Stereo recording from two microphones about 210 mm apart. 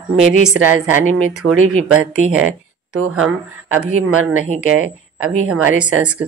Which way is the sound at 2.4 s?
90° right.